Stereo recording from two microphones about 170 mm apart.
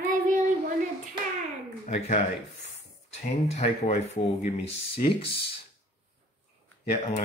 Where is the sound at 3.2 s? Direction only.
40° left (ahead or behind).